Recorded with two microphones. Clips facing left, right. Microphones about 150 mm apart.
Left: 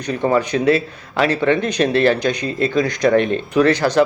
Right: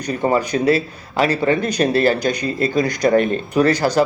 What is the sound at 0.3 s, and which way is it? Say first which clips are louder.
Speech: left 1 dB; 40° right (ahead or behind).